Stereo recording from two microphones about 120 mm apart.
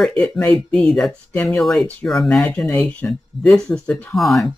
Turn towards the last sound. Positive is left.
turn(degrees=0)  # may be behind; listen again after turning